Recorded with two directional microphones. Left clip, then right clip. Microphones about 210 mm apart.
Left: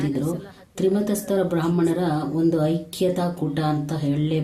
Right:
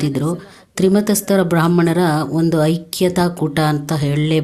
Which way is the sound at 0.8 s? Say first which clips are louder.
Right 6 dB; 45° right (ahead or behind).